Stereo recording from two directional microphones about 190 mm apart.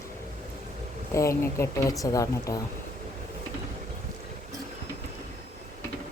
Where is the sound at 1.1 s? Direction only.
15° left (ahead or behind).